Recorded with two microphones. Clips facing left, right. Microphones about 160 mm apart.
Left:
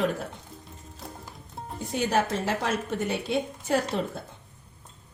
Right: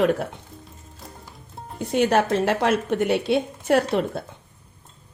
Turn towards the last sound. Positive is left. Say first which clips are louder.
# right 6 dB
turn(degrees=-70)  # may be behind; listen again after turning